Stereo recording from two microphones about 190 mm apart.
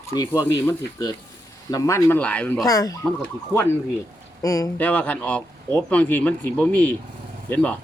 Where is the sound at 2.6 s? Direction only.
20° left (ahead or behind).